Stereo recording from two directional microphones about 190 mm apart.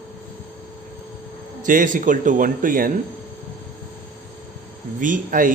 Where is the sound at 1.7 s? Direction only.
45° right (ahead or behind).